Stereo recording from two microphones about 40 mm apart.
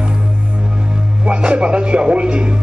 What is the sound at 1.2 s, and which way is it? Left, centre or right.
A man's voice, right.